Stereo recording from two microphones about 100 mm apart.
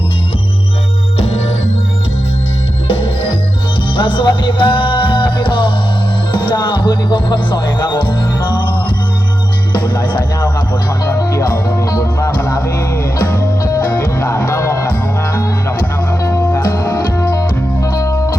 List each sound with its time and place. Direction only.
2.9 s music: 70° left (ahead or behind)
3.9 s music: 55° left (ahead or behind)
11.2 s music: 30° left (ahead or behind)
14.2 s music: 25° left (ahead or behind)
16.2 s music: 25° left (ahead or behind)